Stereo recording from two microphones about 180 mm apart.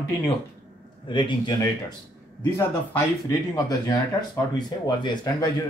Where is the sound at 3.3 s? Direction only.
20° left (ahead or behind).